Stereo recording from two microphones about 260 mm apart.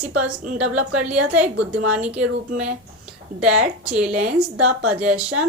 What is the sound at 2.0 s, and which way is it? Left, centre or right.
Speech, centre.